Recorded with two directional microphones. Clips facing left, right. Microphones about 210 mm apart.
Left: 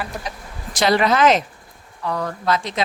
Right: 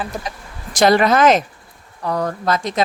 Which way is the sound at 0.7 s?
45° right (ahead or behind).